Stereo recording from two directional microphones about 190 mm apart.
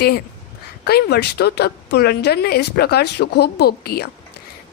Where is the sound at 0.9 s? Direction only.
55° left (ahead or behind).